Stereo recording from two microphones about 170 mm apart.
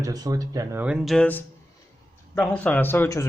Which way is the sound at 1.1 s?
10° left (ahead or behind).